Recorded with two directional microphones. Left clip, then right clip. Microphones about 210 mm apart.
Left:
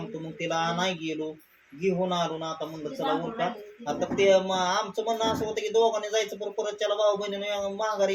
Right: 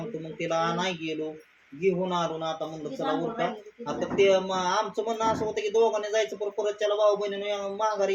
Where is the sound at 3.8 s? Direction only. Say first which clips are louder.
Even; centre (ahead or behind).